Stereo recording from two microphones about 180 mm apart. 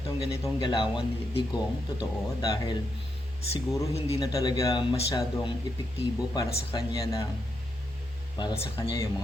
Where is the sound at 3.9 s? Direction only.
35° left (ahead or behind).